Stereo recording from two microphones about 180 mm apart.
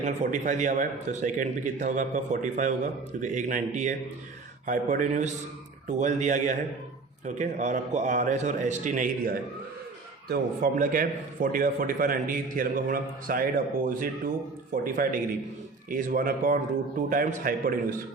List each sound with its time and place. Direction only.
0.0 s a man's voice: 45° right (ahead or behind)